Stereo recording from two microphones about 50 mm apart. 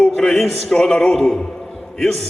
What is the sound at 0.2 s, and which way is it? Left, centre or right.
A man's voice, centre.